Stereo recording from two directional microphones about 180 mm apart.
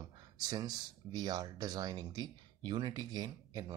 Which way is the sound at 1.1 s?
20° right (ahead or behind).